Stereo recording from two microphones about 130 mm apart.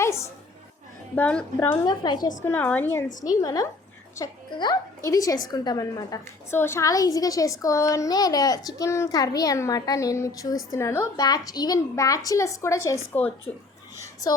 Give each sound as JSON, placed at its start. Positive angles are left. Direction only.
{"t": 0.0, "sound": "music", "side_deg": 20}
{"t": 1.1, "sound": "a woman's voice", "side_deg": 10}
{"t": 1.8, "sound": "a woman's voice", "side_deg": 30}
{"t": 2.4, "sound": "a woman's voice", "side_deg": 10}
{"t": 13.5, "sound": "a woman's voice", "side_deg": 10}